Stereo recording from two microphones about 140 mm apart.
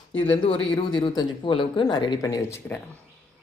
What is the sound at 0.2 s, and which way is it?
Speech, 35° left (ahead or behind).